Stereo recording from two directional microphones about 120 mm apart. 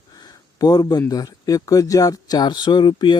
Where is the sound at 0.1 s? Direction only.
35° left (ahead or behind).